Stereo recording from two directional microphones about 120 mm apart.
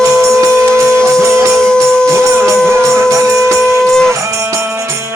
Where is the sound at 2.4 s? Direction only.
25° right (ahead or behind).